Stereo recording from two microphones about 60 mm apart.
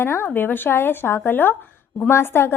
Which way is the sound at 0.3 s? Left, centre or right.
Left.